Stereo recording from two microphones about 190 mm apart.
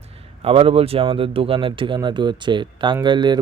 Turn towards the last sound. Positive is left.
turn(degrees=-25)  # may be behind; listen again after turning